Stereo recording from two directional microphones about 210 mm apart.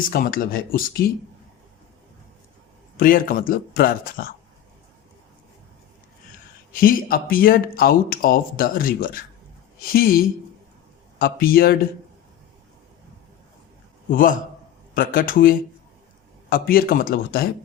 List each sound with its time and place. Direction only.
0.1 s speech: 45° left (ahead or behind)
3.0 s speech: 40° left (ahead or behind)
6.7 s speech: 45° left (ahead or behind)
14.1 s speech: 40° left (ahead or behind)